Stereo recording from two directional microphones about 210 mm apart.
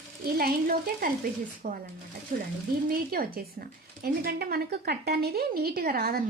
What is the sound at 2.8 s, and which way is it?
A woman's voice, 45° right (ahead or behind).